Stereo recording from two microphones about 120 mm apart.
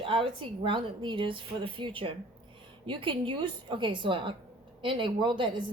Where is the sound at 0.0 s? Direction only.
45° right (ahead or behind).